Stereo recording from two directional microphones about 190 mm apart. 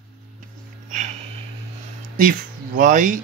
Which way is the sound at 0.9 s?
40° right (ahead or behind).